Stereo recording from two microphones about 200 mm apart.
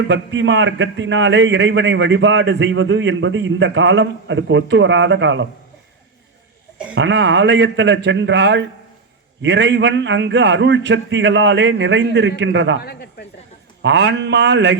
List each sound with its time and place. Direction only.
0.1 s a man's voice: 60° right (ahead or behind)
6.9 s a man's voice: 65° right (ahead or behind)
12.8 s a man's voice: 50° left (ahead or behind)
13.8 s a man's voice: 60° right (ahead or behind)